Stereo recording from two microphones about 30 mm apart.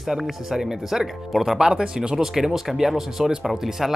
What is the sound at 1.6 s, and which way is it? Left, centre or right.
Speech, right.